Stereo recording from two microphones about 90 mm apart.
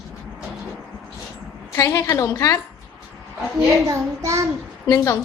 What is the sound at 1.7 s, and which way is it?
Speech, 35° left (ahead or behind).